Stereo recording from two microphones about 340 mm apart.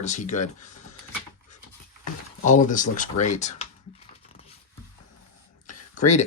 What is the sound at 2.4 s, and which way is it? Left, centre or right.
Speech, left.